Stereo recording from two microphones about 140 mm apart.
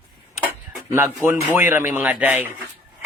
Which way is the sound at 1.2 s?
15° right (ahead or behind).